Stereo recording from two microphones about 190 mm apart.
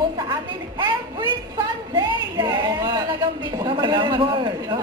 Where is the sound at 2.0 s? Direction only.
25° right (ahead or behind).